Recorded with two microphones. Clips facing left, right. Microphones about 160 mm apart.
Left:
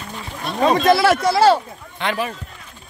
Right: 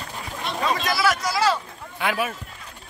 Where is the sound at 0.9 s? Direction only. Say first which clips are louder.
Left 9 dB; 30° left (ahead or behind).